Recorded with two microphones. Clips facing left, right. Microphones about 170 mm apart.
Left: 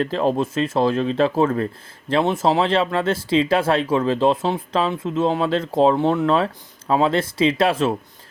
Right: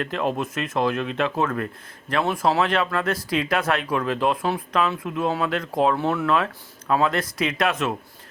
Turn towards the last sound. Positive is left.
turn(degrees=30)  # may be behind; listen again after turning